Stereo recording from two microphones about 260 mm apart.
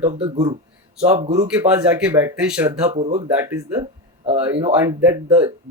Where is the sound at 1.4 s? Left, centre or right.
Centre.